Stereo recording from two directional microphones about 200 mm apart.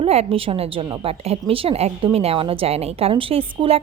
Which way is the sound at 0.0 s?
30° right (ahead or behind).